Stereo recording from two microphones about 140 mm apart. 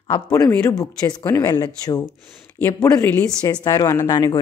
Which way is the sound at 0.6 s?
25° left (ahead or behind).